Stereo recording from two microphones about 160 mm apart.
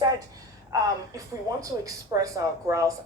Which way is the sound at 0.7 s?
20° right (ahead or behind).